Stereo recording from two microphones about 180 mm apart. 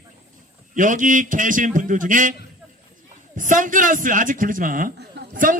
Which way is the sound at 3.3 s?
45° right (ahead or behind).